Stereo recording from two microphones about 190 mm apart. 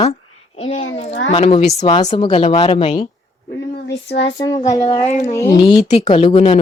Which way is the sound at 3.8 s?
65° left (ahead or behind).